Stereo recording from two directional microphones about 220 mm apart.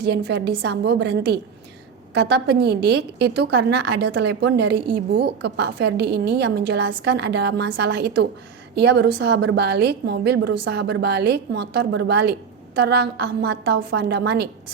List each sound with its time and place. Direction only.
0.0 s a woman's voice: 50° right (ahead or behind)